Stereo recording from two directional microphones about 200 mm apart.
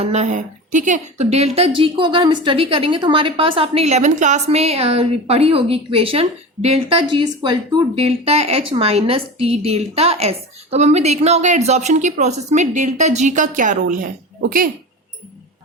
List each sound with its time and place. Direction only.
0.0 s a woman's voice: 35° right (ahead or behind)